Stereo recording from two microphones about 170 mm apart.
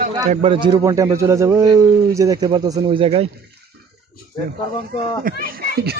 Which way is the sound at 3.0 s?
35° right (ahead or behind).